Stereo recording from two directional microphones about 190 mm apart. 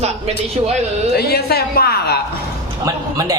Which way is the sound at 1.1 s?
55° left (ahead or behind).